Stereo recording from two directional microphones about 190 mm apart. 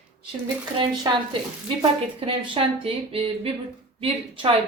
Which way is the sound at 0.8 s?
25° right (ahead or behind).